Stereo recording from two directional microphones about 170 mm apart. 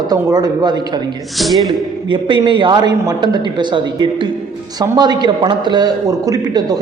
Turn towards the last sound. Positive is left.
turn(degrees=-20)  # may be behind; listen again after turning